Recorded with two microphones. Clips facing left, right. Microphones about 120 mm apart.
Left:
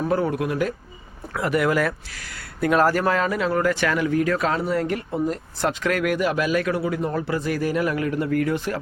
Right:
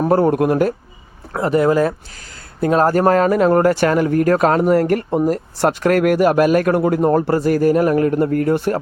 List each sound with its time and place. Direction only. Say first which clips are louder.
0.0 s speech: right 8 dB; 50° right (ahead or behind)
1.3 s speech: right 6 dB; 35° right (ahead or behind)
8.5 s speech: right 8 dB; 55° right (ahead or behind)